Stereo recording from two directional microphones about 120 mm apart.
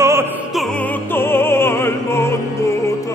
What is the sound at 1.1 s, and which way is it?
Music, 20° left (ahead or behind).